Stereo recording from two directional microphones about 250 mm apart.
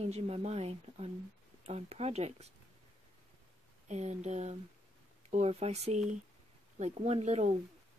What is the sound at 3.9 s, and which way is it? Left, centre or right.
Speech, right.